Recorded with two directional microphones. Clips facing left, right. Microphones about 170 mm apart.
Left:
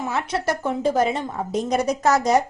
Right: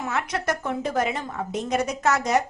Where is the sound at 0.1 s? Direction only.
30° left (ahead or behind).